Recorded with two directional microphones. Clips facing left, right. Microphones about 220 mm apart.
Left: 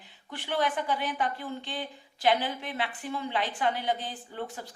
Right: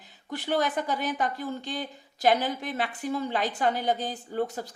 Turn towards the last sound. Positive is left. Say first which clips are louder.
# right 8 dB
turn(degrees=-40)  # may be behind; listen again after turning